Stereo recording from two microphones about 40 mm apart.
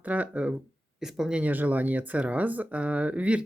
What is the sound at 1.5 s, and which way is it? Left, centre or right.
Speech, right.